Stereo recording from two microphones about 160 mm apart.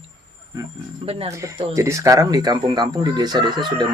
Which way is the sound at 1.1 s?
40° right (ahead or behind).